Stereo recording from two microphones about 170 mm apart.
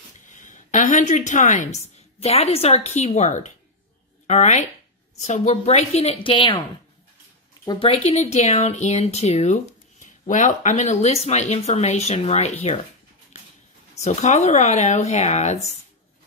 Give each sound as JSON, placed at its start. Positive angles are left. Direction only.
{"t": 0.3, "sound": "a woman's voice", "side_deg": 45}
{"t": 7.6, "sound": "speech", "side_deg": 25}
{"t": 7.9, "sound": "speech", "side_deg": 40}
{"t": 14.0, "sound": "speech", "side_deg": 40}